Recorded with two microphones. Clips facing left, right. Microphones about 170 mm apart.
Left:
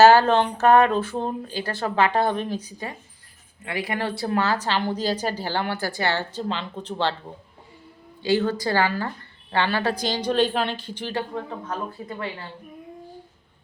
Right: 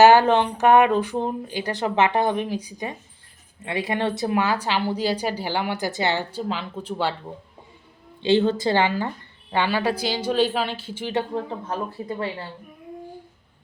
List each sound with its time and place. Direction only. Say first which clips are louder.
0.0 s a woman's voice: even; 15° right (ahead or behind)
8.2 s a woman's voice: right 3 dB; 25° right (ahead or behind); by 11.1 s 10° right (ahead or behind)
11.1 s speech: right 4 dB; 25° right (ahead or behind)